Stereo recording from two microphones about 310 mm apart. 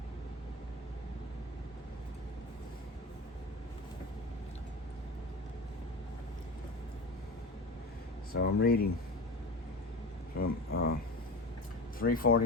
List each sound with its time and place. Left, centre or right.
8.4 s speech: left
10.3 s a sound: left
11.9 s speech: left